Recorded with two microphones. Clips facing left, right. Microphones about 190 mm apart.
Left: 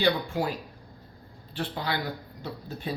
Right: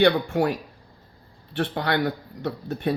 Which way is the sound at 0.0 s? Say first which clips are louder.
Right 6 dB; 70° right (ahead or behind).